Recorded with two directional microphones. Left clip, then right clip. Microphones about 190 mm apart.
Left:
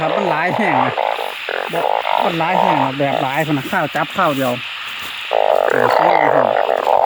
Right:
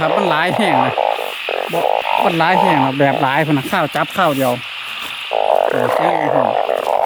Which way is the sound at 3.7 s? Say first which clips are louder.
Even; 10° right (ahead or behind).